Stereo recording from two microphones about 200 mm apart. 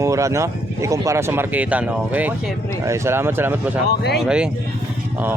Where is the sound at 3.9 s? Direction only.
55° left (ahead or behind).